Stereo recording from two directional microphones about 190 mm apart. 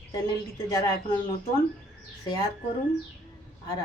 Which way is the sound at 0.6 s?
20° left (ahead or behind).